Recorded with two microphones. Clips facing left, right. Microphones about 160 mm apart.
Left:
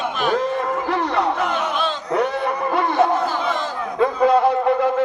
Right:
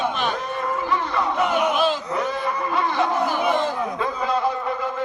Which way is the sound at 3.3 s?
15° right (ahead or behind).